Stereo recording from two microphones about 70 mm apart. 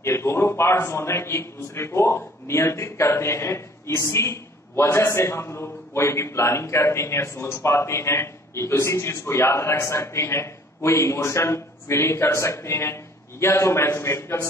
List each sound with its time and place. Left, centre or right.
0.0 s a man's voice: left